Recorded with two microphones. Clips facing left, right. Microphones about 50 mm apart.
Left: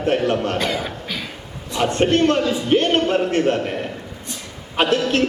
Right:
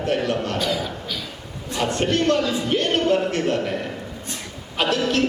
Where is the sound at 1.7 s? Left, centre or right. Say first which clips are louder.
Left 4 dB; left.